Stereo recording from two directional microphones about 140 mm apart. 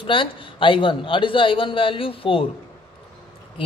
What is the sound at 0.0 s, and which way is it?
Speech, 35° left (ahead or behind).